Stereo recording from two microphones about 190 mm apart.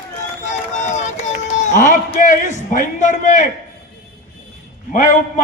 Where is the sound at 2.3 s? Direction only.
40° left (ahead or behind).